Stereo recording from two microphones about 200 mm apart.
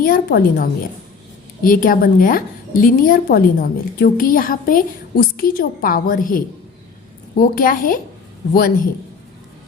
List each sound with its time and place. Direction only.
0.0 s a woman's voice: 45° left (ahead or behind)